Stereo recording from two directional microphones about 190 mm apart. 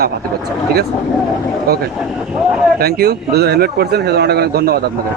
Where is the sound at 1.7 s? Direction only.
55° right (ahead or behind).